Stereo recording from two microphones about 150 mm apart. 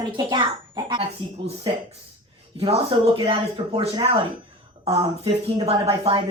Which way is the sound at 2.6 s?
40° right (ahead or behind).